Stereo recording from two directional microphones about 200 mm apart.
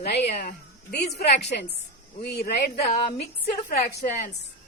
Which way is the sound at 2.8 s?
30° left (ahead or behind).